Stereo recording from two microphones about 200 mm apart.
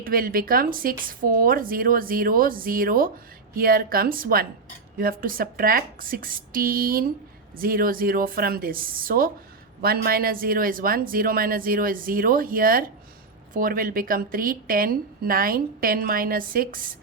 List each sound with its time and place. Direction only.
0.0 s speech: 45° right (ahead or behind)